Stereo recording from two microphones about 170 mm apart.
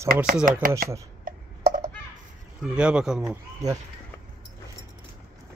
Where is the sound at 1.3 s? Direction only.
55° right (ahead or behind).